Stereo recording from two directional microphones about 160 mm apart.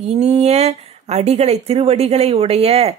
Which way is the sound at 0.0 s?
40° right (ahead or behind).